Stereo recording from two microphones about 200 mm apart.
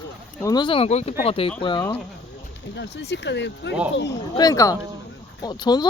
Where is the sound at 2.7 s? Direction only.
60° left (ahead or behind).